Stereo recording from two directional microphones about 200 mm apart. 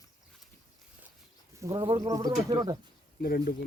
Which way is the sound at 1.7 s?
20° right (ahead or behind).